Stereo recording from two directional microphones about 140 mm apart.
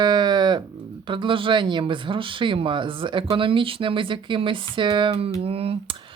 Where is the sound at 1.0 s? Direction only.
35° right (ahead or behind).